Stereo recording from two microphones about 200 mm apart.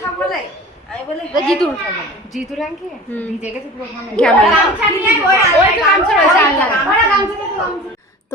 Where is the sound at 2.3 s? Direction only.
Centre (ahead or behind).